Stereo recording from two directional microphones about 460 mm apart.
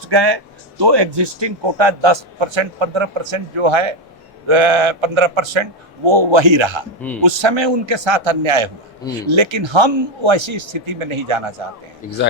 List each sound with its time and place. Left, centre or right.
0.1 s a man's voice: right
9.3 s a man's voice: right
12.0 s a man's voice: centre